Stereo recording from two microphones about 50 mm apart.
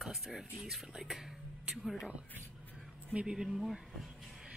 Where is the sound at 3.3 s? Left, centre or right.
Centre.